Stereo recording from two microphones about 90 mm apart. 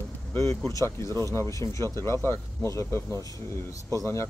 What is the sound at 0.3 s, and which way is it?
Speech, 30° left (ahead or behind).